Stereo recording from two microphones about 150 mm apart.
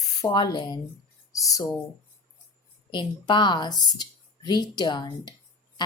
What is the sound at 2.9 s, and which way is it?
Speech, 30° left (ahead or behind).